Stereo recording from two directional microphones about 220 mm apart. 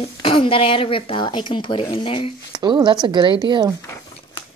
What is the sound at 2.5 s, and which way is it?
Speech, 20° right (ahead or behind).